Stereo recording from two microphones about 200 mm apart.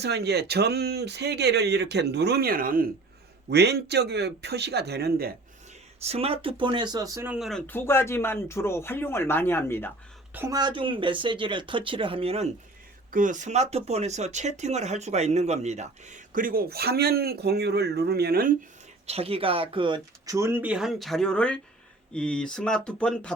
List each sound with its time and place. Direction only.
0.0 s speech: 55° right (ahead or behind)
3.5 s speech: 55° right (ahead or behind)
6.0 s speech: 30° right (ahead or behind); by 7.6 s centre (ahead or behind)
7.7 s speech: 10° left (ahead or behind)
10.3 s speech: 15° right (ahead or behind)
13.1 s speech: 40° right (ahead or behind)
19.0 s speech: 30° right (ahead or behind); by 23.3 s 5° left (ahead or behind)